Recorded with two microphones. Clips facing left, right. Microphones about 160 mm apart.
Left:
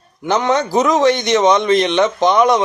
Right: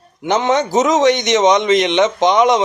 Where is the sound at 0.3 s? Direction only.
20° right (ahead or behind).